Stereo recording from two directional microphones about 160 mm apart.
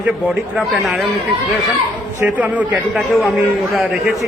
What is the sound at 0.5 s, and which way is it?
Speech, 5° right (ahead or behind).